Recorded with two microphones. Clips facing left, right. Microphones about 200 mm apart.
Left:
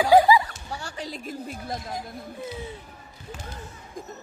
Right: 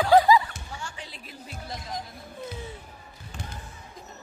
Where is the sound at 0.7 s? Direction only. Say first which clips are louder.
Left 7 dB; 40° left (ahead or behind).